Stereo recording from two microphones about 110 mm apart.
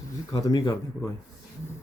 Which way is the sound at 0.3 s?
35° left (ahead or behind).